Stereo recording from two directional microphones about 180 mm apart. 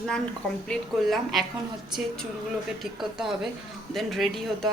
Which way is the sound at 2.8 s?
Centre (ahead or behind).